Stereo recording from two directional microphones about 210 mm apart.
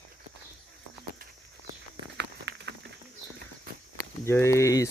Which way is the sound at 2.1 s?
55° right (ahead or behind).